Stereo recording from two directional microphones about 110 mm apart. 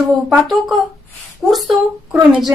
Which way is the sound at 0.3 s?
Centre (ahead or behind).